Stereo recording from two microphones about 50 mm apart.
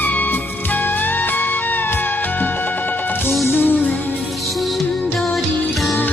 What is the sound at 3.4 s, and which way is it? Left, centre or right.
Music, left.